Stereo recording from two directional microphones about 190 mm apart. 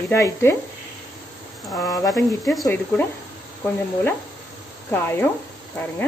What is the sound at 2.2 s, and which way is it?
Sizzle, centre (ahead or behind).